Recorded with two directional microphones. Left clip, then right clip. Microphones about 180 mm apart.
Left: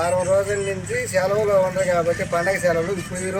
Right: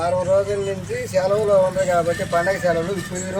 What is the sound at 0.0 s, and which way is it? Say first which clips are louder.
Speech: right 1 dB; 10° left (ahead or behind).